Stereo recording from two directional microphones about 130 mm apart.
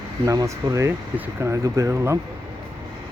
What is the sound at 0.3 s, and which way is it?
Speech, 25° right (ahead or behind).